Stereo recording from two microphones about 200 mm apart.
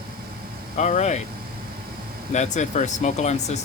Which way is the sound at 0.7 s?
35° left (ahead or behind).